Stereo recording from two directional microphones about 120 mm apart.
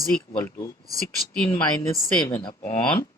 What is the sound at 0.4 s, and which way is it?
Speech, 25° left (ahead or behind).